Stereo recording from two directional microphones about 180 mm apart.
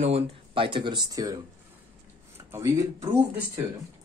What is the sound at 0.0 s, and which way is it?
Speech, 30° right (ahead or behind).